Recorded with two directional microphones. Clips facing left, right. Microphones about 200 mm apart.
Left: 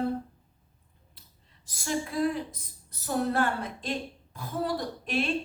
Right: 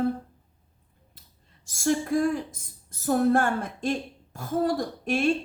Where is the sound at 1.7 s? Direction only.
45° right (ahead or behind).